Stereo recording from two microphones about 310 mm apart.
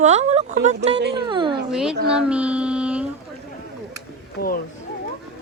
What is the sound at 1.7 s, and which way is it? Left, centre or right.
Speech, centre.